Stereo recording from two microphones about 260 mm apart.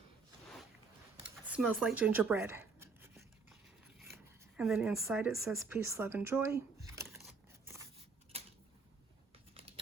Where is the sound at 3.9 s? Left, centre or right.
Centre.